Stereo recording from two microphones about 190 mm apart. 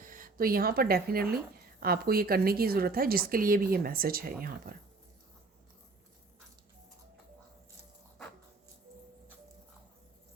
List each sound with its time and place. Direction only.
0.0 s a woman's voice: 45° right (ahead or behind)